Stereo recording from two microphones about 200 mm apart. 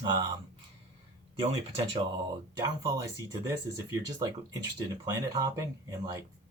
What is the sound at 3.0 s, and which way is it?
Speech, 15° right (ahead or behind).